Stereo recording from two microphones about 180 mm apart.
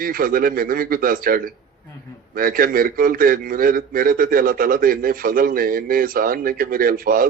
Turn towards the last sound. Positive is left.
turn(degrees=-55)  # may be behind; listen again after turning